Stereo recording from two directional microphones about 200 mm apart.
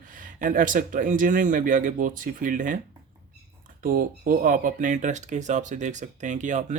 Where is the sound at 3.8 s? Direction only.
45° right (ahead or behind).